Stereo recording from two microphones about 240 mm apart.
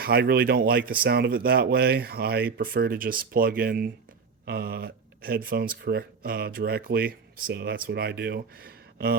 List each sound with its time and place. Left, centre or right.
0.0 s speech: right